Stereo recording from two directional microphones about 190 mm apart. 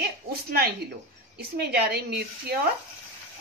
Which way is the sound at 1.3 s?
55° right (ahead or behind).